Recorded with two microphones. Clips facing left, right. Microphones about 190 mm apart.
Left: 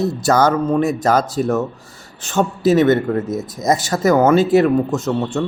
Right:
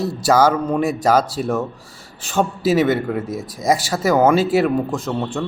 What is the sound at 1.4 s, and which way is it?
Speech, 40° left (ahead or behind).